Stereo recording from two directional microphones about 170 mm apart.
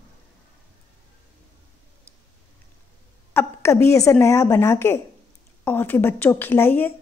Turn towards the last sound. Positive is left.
turn(degrees=10)  # may be behind; listen again after turning